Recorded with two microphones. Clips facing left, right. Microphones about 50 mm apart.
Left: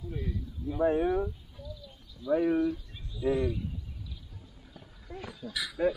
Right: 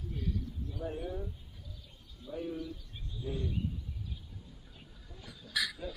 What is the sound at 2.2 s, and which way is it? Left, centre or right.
Speech, left.